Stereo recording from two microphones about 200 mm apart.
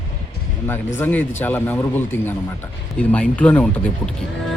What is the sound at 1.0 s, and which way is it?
Speech, 10° left (ahead or behind).